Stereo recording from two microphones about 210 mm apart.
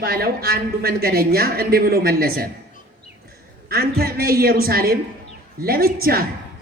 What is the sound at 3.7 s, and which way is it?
A woman's voice, 45° right (ahead or behind).